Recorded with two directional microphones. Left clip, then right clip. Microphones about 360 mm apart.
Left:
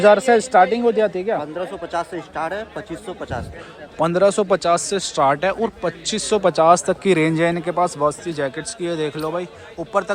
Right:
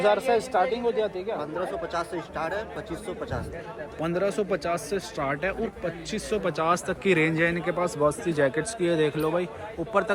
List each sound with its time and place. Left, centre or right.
0.3 s speech: left
4.0 s a man's voice: centre